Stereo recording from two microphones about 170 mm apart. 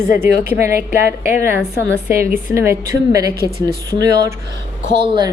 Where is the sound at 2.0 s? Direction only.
15° right (ahead or behind).